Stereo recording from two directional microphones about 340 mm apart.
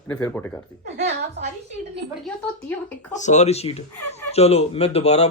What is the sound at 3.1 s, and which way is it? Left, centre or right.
Speech, left.